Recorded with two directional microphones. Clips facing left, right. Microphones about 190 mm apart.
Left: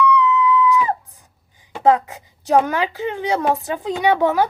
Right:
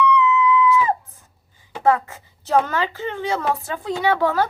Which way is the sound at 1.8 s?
15° left (ahead or behind).